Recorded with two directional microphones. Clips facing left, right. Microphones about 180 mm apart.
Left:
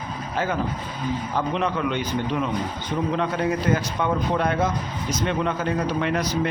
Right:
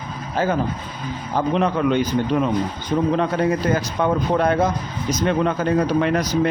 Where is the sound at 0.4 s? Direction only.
35° right (ahead or behind).